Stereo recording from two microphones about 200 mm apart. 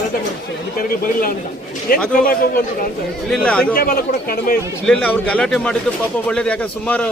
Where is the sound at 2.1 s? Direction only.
45° left (ahead or behind).